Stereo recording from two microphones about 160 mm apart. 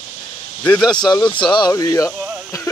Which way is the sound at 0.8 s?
25° left (ahead or behind).